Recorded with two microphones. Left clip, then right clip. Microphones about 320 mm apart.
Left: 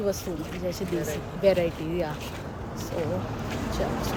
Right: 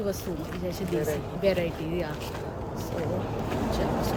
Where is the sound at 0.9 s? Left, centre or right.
Centre.